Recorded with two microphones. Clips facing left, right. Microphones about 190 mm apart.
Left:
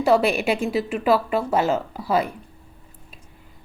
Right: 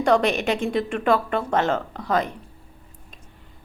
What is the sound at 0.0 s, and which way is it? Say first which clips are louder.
A woman's voice: left 1 dB; 5° left (ahead or behind).